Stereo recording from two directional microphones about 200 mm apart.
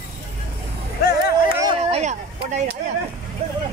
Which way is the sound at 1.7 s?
35° right (ahead or behind).